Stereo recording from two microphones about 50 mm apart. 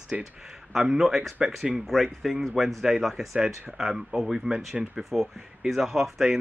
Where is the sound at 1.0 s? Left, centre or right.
Centre.